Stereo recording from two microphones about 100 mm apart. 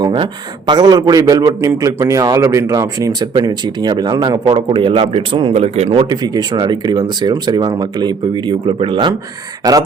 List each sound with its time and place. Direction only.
0.0 s a man's voice: 50° right (ahead or behind); by 6.1 s 85° right
6.1 s speech: 40° right (ahead or behind)
9.6 s a man's voice: 40° right (ahead or behind)